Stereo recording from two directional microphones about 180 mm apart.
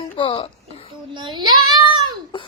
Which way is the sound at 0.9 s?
25° right (ahead or behind).